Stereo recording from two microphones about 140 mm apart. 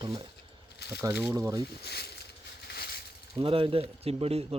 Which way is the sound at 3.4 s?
40° right (ahead or behind).